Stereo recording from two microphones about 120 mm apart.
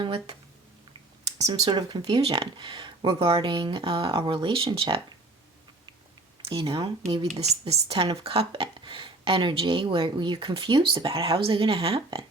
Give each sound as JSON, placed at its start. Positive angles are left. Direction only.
{"t": 0.0, "sound": "speech", "side_deg": -50}
{"t": 1.7, "sound": "speech", "side_deg": -35}
{"t": 6.5, "sound": "speech", "side_deg": -45}
{"t": 7.1, "sound": "speech", "side_deg": -35}
{"t": 7.6, "sound": "speech", "side_deg": -50}